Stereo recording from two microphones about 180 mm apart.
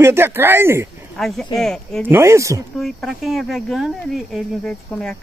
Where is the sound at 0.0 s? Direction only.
15° right (ahead or behind).